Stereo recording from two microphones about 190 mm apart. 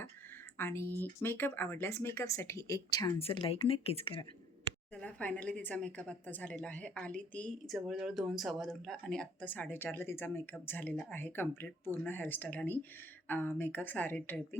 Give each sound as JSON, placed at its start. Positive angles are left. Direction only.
{"t": 0.5, "sound": "a woman's voice", "side_deg": 10}
{"t": 3.2, "sound": "speech", "side_deg": 30}
{"t": 4.9, "sound": "a woman's voice", "side_deg": 10}